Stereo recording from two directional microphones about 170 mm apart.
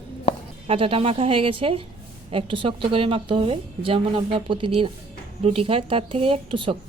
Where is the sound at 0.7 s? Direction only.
30° right (ahead or behind).